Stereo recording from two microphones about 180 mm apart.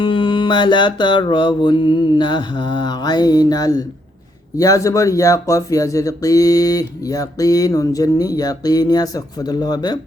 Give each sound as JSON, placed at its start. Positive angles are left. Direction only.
{"t": 0.0, "sound": "speech", "side_deg": 25}